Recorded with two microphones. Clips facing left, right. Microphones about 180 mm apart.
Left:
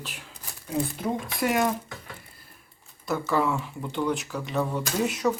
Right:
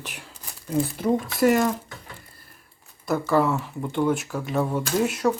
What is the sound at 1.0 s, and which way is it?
Speech, centre (ahead or behind).